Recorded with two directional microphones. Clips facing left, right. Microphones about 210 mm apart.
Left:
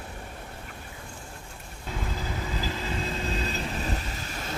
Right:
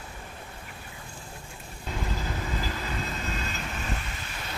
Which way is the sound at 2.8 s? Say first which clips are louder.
Left 2 dB; 30° left (ahead or behind).